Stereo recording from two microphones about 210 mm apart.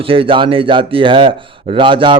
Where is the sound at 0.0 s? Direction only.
25° right (ahead or behind).